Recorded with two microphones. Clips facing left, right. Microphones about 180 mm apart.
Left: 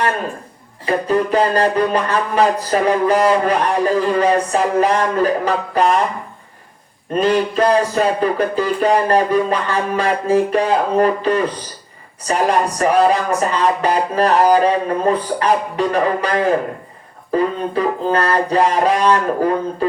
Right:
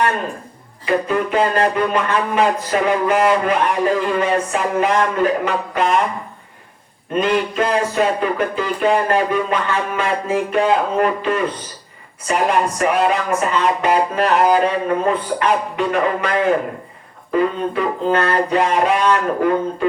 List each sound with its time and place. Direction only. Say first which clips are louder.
0.9 s speech: left 2 dB; 35° left (ahead or behind)
7.1 s speech: left 2 dB; 35° left (ahead or behind)